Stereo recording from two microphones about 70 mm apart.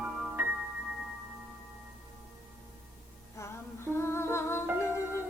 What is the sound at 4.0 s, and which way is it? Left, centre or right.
Humming, left.